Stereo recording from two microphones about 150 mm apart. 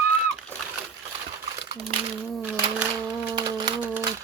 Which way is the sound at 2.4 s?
10° right (ahead or behind).